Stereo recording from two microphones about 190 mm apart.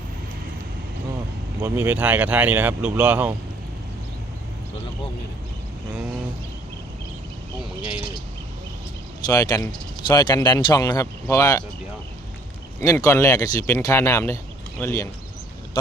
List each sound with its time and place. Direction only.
1.6 s speech: 10° right (ahead or behind)
7.8 s speech: 5° right (ahead or behind)
9.2 s speech: 20° left (ahead or behind)
12.8 s speech: 15° left (ahead or behind)